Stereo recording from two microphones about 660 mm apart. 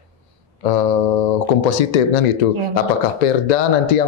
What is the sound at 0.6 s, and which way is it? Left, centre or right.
Speech, left.